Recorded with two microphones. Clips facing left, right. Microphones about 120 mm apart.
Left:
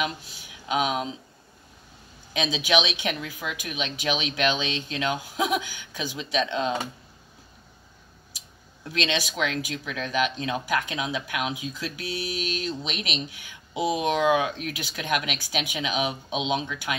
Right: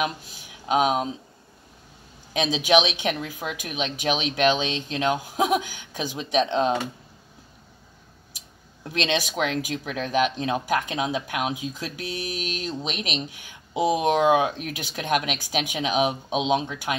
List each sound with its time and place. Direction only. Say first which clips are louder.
0.7 s speech: right 4 dB; 40° right (ahead or behind)
2.3 s speech: right 4 dB; 40° right (ahead or behind)
8.8 s speech: right 2 dB; 45° right (ahead or behind)